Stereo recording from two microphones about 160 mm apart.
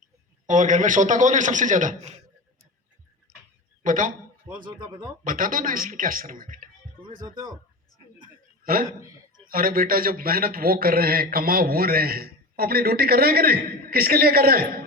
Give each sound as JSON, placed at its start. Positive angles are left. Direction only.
{"t": 0.4, "sound": "a man's voice", "side_deg": -50}
{"t": 3.8, "sound": "speech", "side_deg": -55}
{"t": 4.6, "sound": "speech", "side_deg": -30}
{"t": 5.2, "sound": "speech", "side_deg": -60}
{"t": 8.6, "sound": "a man's voice", "side_deg": -65}
{"t": 9.0, "sound": "a sound", "side_deg": -20}
{"t": 9.5, "sound": "a man's voice", "side_deg": -65}